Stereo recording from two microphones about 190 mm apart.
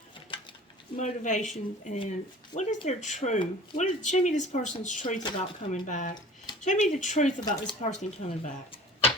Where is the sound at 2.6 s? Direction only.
40° left (ahead or behind).